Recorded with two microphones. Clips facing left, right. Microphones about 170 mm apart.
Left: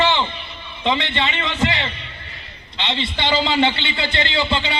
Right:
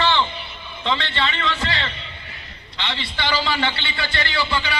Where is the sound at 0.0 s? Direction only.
20° left (ahead or behind).